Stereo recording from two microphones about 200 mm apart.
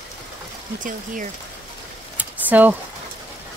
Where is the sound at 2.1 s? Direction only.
10° right (ahead or behind).